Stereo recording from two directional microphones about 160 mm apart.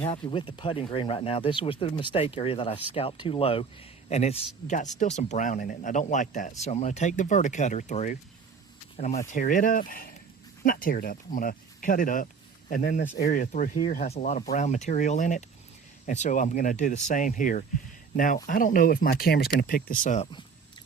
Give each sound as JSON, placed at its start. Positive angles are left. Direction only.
{"t": 0.0, "sound": "speech", "side_deg": 35}